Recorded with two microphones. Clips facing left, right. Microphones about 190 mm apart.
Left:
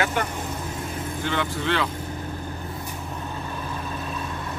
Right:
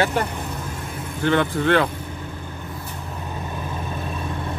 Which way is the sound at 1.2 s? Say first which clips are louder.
Right 8 dB; 55° right (ahead or behind).